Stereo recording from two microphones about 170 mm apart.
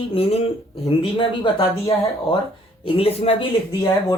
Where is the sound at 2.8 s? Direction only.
35° left (ahead or behind).